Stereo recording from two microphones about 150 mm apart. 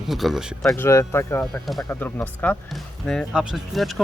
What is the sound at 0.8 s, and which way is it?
Speech, 20° left (ahead or behind).